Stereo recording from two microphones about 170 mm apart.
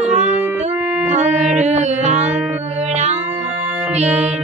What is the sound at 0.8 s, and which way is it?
Music, 5° right (ahead or behind).